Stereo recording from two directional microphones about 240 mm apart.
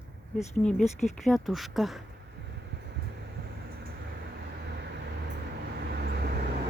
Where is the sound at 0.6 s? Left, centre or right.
Centre.